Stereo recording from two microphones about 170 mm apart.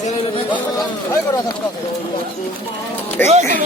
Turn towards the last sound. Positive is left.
turn(degrees=-45)  # may be behind; listen again after turning